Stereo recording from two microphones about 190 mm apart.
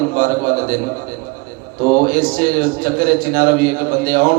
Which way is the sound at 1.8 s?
50° right (ahead or behind).